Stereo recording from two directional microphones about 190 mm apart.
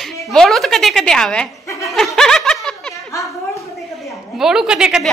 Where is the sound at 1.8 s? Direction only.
Centre (ahead or behind).